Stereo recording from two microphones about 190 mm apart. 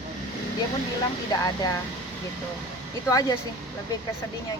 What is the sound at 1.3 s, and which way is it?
Speech, 20° left (ahead or behind).